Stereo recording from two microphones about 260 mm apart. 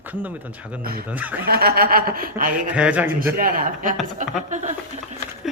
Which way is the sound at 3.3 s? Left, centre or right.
Right.